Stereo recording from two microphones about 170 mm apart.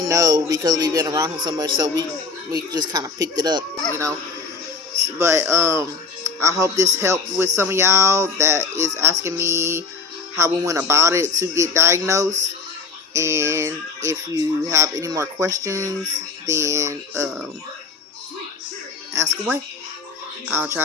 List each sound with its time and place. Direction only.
0.1 s a man's voice: 20° right (ahead or behind)
5.2 s a man's voice: 15° right (ahead or behind)
19.1 s speech: 15° right (ahead or behind)